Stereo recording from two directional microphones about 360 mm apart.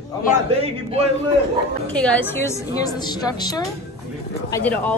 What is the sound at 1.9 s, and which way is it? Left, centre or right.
A woman's voice, centre.